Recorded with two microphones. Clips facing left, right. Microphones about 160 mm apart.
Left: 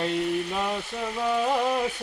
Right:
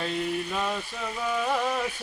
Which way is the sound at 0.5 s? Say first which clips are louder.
Left 2 dB; 15° left (ahead or behind).